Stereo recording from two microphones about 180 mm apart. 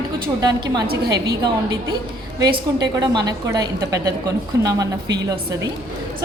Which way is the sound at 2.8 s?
20° right (ahead or behind).